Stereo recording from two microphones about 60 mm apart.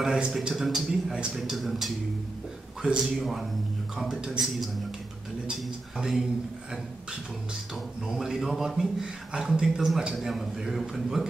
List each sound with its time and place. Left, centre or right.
0.0 s a man's voice: centre
2.8 s a man's voice: centre
3.2 s a man's voice: centre
5.6 s a sound: centre
7.7 s speech: centre